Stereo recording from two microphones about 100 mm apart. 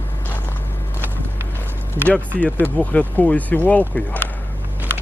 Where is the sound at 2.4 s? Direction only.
15° left (ahead or behind).